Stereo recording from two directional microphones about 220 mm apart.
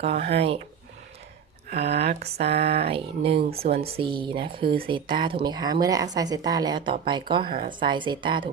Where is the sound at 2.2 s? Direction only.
45° right (ahead or behind).